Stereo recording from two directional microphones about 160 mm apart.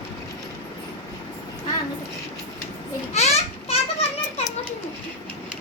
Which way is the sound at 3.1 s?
40° left (ahead or behind).